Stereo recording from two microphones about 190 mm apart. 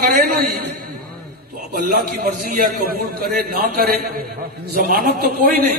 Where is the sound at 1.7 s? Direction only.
50° right (ahead or behind).